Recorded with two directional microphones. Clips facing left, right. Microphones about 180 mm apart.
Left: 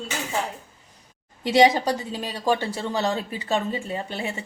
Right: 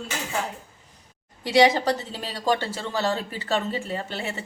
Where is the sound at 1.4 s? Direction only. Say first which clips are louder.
Left 1 dB; 20° left (ahead or behind).